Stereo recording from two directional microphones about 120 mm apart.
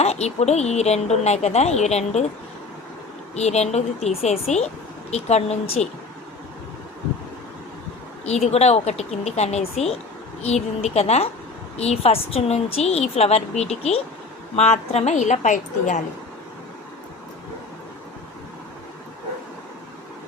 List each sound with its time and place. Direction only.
0.0 s speech: 65° left (ahead or behind)
3.3 s speech: 65° left (ahead or behind)
8.4 s a woman's voice: 65° left (ahead or behind); by 16.0 s 90° left